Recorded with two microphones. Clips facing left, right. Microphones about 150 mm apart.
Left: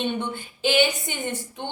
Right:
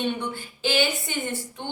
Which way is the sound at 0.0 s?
20° left (ahead or behind).